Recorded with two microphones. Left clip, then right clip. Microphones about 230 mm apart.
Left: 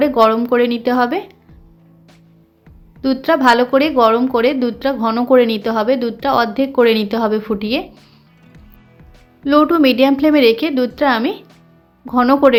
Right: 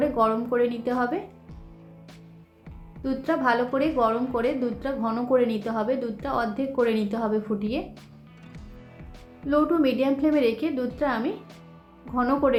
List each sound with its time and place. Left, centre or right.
0.0 s speech: left
3.0 s speech: left
9.5 s speech: left